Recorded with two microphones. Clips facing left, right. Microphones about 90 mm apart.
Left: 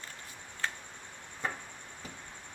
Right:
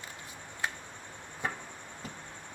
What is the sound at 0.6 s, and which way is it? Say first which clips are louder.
Tick-tock: right 1 dB; 15° right (ahead or behind).